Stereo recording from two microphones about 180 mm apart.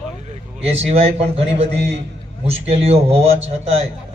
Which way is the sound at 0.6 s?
35° right (ahead or behind).